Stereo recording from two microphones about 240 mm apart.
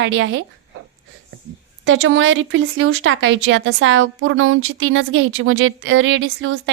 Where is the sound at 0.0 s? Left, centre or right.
Right.